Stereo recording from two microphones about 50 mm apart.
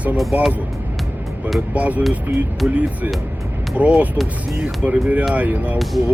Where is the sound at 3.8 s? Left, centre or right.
Right.